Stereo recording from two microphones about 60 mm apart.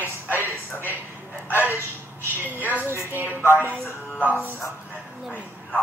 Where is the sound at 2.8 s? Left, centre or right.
Left.